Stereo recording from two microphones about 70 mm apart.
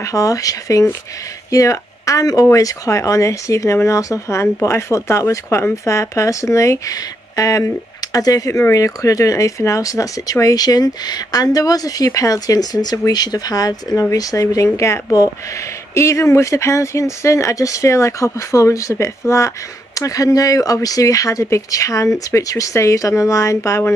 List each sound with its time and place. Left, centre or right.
0.0 s speech: left
8.5 s speech: left